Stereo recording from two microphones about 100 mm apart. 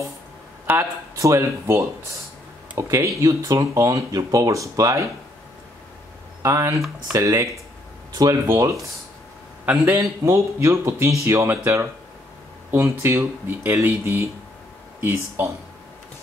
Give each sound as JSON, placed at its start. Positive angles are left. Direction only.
{"t": 0.7, "sound": "speech", "side_deg": -30}
{"t": 6.4, "sound": "speech", "side_deg": -30}